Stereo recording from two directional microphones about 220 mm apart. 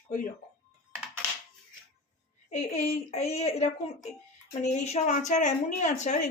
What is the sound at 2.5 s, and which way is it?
A child's voice, 30° left (ahead or behind).